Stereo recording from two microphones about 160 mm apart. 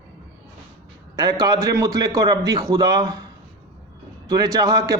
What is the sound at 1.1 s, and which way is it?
A man's voice, 20° right (ahead or behind).